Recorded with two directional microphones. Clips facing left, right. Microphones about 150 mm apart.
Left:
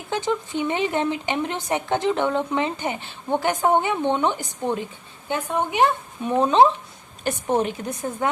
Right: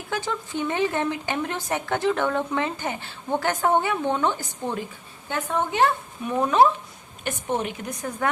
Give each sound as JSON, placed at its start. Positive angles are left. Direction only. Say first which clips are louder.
{"t": 0.1, "sound": "a woman's voice", "louder": "left 4 dB", "side_deg": 20}
{"t": 6.2, "sound": "speech", "louder": "left 2 dB", "side_deg": 25}
{"t": 7.3, "sound": "speech", "louder": "left 5 dB", "side_deg": 35}